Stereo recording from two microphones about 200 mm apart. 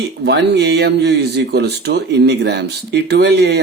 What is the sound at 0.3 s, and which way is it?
Speech, 55° right (ahead or behind).